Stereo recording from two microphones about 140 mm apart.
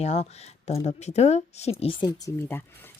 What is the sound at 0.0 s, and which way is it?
Speech, 50° left (ahead or behind).